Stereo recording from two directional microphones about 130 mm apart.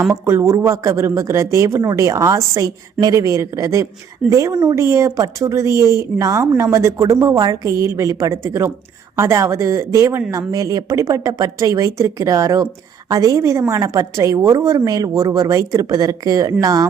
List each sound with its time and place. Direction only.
0.1 s speech: 20° right (ahead or behind)